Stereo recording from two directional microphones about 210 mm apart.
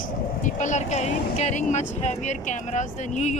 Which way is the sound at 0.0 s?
40° left (ahead or behind).